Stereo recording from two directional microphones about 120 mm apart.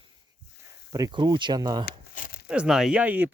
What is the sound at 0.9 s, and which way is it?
Speech, 35° right (ahead or behind).